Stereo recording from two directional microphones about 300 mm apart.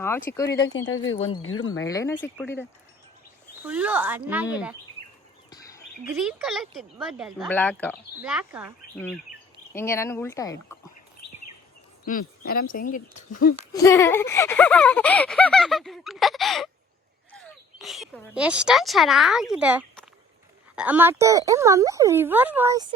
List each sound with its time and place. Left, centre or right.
0.0 s speech: centre
0.6 s speech: left
1.9 s speech: centre
3.7 s a sound: centre
6.1 s a sound: centre
9.7 s speech: centre
12.0 s speech: left
13.7 s a sound: centre
17.3 s speech: centre